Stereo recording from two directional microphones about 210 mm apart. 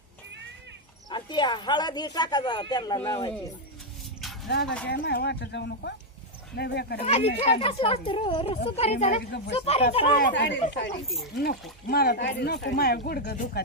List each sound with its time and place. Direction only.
1.1 s speech: 20° left (ahead or behind)
4.4 s speech: 55° left (ahead or behind)
7.0 s speech: 30° left (ahead or behind)
10.2 s speech: 55° left (ahead or behind)
11.9 s speech: 45° left (ahead or behind)